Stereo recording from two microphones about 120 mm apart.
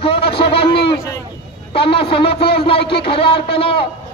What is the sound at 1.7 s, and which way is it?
A man's voice, 50° left (ahead or behind).